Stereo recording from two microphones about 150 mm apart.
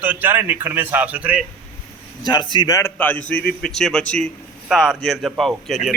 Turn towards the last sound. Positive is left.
turn(degrees=0)  # may be behind; listen again after turning